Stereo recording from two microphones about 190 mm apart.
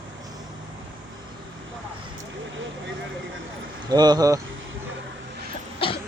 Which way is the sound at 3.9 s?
20° right (ahead or behind).